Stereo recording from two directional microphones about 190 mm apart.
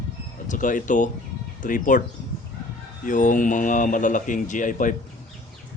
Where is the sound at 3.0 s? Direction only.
45° left (ahead or behind).